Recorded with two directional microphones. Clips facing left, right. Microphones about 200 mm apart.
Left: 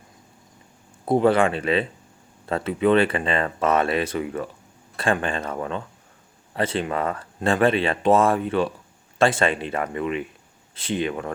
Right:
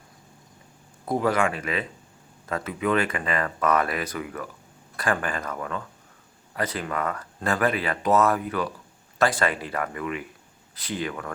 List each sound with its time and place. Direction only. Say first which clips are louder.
1.0 s speech: left 5 dB; 30° left (ahead or behind)